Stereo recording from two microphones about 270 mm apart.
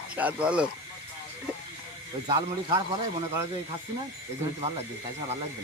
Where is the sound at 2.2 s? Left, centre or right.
Centre.